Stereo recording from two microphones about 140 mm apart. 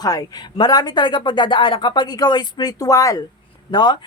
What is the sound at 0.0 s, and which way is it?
Speech, 25° left (ahead or behind).